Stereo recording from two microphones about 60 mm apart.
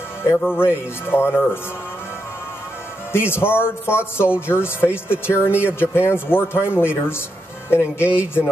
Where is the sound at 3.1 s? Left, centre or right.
Left.